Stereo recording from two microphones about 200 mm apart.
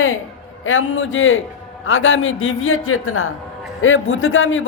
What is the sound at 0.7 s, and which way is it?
A woman's voice, 75° left (ahead or behind).